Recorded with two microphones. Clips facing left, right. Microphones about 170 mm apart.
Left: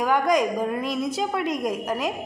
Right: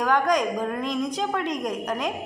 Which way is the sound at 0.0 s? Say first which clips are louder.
Left 1 dB; 10° left (ahead or behind).